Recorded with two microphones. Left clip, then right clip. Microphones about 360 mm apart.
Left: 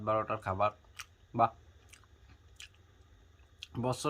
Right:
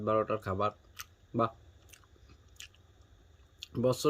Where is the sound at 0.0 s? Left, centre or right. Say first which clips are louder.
Right 2 dB; centre.